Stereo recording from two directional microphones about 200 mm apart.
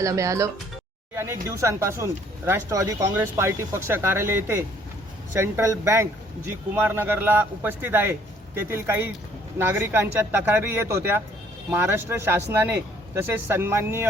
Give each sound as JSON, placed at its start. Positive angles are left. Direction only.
{"t": 0.0, "sound": "speech", "side_deg": -15}
{"t": 1.1, "sound": "a sound", "side_deg": -10}
{"t": 1.5, "sound": "speech", "side_deg": -15}